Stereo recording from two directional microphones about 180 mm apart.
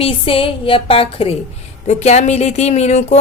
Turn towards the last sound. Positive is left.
turn(degrees=40)  # may be behind; listen again after turning